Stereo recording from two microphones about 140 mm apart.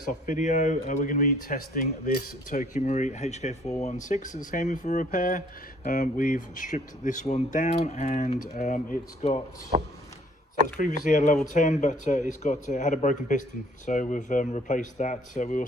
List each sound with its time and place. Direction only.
0.0 s speech: 70° left (ahead or behind)
9.7 s a sound: 50° right (ahead or behind)
10.8 s speech: 60° left (ahead or behind)